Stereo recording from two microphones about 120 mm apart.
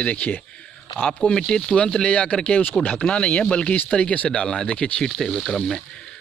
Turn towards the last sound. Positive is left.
turn(degrees=0)  # may be behind; listen again after turning